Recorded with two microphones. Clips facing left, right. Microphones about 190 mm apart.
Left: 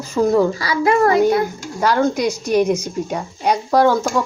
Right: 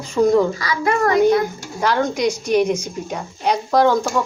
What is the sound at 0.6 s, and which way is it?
Speech, 30° left (ahead or behind).